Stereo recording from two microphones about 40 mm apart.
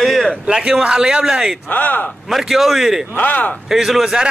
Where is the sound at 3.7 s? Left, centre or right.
Centre.